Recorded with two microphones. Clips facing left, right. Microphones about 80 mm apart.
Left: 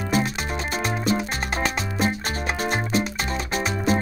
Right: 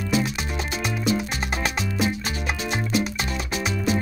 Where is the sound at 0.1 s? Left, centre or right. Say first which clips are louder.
Left 1 dB; left.